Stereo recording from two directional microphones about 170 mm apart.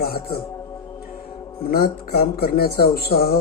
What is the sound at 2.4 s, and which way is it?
Speech, 65° left (ahead or behind).